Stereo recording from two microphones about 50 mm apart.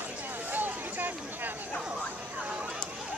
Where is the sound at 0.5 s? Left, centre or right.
Right.